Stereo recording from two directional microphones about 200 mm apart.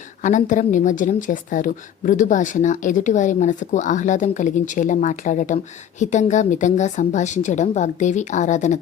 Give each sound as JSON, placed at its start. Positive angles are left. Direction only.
{"t": 0.2, "sound": "speech", "side_deg": 40}